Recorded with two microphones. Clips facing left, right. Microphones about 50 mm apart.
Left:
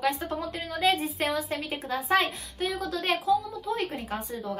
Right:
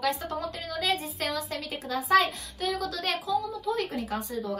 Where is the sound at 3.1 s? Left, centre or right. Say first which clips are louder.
Left 6 dB; centre.